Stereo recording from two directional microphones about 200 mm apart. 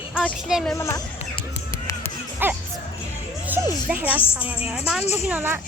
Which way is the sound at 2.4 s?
10° right (ahead or behind).